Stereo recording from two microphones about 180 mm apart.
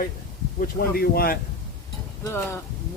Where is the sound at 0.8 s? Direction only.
55° left (ahead or behind).